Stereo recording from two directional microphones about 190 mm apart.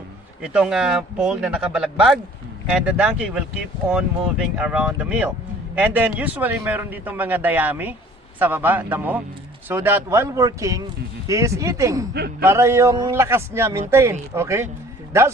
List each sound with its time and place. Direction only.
0.4 s a man's voice: 5° right (ahead or behind)